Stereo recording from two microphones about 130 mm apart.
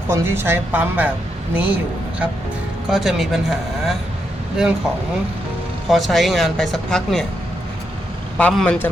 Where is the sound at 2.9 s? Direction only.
Centre (ahead or behind).